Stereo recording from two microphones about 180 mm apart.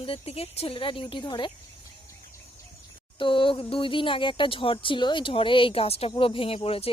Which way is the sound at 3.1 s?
30° left (ahead or behind).